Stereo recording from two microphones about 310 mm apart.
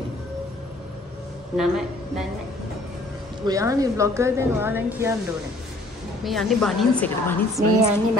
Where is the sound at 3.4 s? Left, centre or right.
Centre.